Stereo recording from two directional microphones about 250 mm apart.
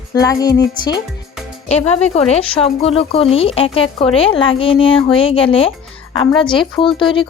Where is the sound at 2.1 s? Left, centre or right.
Left.